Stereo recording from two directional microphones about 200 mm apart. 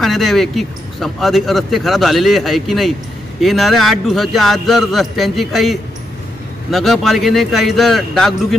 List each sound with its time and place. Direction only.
0.0 s speech: centre (ahead or behind)